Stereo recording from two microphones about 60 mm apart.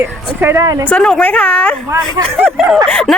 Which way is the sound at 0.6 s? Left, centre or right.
Right.